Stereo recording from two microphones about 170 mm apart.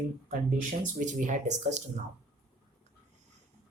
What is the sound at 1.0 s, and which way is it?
Speech, 45° right (ahead or behind).